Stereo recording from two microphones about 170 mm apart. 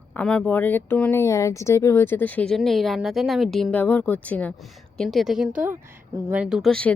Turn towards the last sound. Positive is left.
turn(degrees=5)  # may be behind; listen again after turning